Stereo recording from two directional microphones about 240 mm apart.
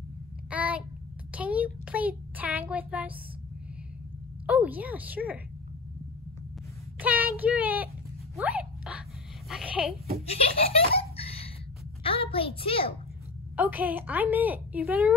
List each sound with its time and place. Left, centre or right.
0.5 s a sound: centre
4.5 s a woman's voice: centre
7.0 s speech: centre
8.4 s a sound: centre
10.6 s laughter: left
12.0 s a child's voice: left
13.6 s a woman's voice: centre